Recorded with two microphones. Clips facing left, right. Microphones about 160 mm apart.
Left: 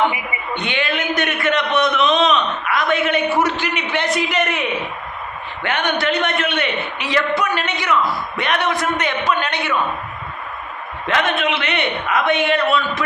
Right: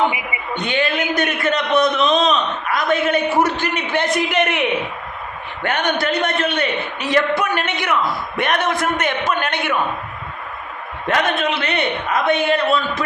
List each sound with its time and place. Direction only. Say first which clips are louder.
0.5 s a man's voice: right 2 dB; 40° right (ahead or behind)
4.3 s a woman's voice: right 2 dB; 60° right (ahead or behind)
5.6 s a man's voice: even; 40° right (ahead or behind)
11.0 s a man's voice: right 1 dB; 40° right (ahead or behind)